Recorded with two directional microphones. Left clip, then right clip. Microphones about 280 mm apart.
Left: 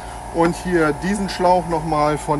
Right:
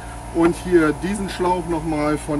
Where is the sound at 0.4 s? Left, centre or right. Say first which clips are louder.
Right 1 dB; left.